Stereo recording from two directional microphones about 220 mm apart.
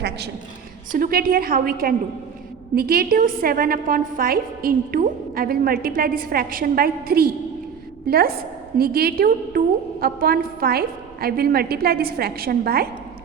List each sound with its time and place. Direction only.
0.9 s a woman's voice: 40° right (ahead or behind)